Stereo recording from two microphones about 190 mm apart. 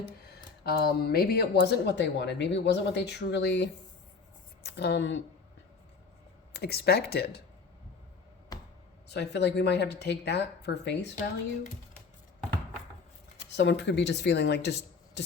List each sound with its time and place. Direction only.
0.6 s speech: 55° left (ahead or behind)
6.5 s speech: 55° left (ahead or behind)
8.5 s a sound: 20° left (ahead or behind)
9.0 s speech: 60° left (ahead or behind)
13.6 s speech: 65° left (ahead or behind)